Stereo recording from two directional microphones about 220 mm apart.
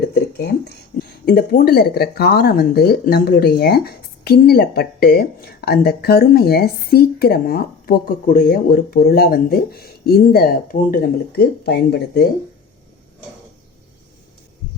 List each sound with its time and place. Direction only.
0.1 s speech: 45° left (ahead or behind)